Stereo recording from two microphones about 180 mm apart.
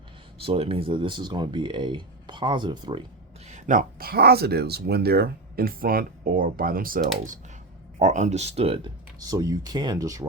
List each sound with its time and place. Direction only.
0.3 s speech: 30° right (ahead or behind)
3.4 s speech: 45° right (ahead or behind); by 10.2 s 20° right (ahead or behind)